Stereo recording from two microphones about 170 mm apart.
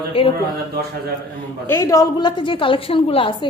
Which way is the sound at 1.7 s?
20° left (ahead or behind).